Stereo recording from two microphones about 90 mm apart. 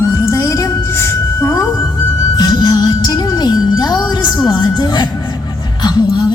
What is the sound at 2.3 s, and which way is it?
Music, 50° left (ahead or behind).